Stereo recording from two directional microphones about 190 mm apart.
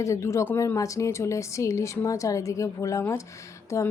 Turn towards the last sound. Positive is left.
turn(degrees=15)  # may be behind; listen again after turning